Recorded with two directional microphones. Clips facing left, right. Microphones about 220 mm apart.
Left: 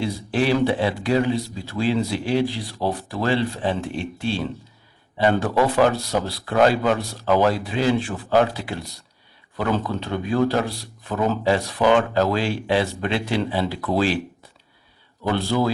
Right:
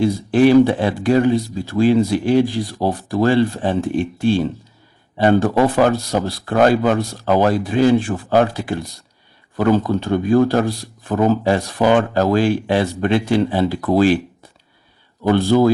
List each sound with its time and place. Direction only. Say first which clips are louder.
0.0 s speech: right 9 dB; 50° right (ahead or behind)
15.2 s speech: right 8 dB; 50° right (ahead or behind)